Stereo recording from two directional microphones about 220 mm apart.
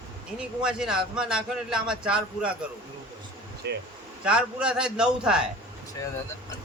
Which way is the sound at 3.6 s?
50° right (ahead or behind).